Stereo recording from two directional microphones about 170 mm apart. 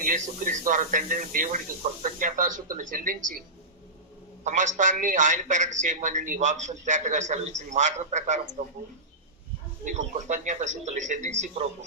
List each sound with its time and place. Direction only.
0.1 s a man's voice: 50° right (ahead or behind)
4.4 s a man's voice: 45° right (ahead or behind)
9.8 s a man's voice: 45° right (ahead or behind)